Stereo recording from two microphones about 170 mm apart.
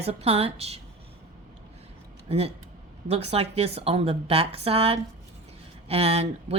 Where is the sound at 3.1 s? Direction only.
35° right (ahead or behind).